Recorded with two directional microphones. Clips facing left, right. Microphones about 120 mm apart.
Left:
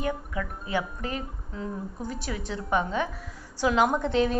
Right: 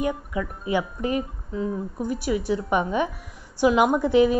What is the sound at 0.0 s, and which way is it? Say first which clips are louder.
A woman's voice: right 4 dB; 15° right (ahead or behind).